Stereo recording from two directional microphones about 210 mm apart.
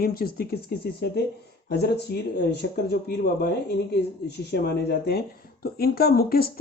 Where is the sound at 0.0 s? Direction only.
45° left (ahead or behind).